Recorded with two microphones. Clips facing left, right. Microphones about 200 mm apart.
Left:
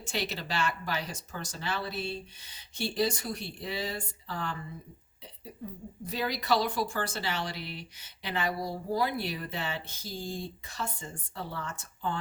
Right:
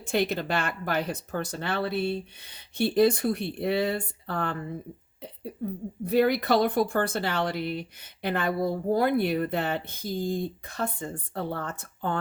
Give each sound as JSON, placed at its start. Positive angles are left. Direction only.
{"t": 0.0, "sound": "speech", "side_deg": -55}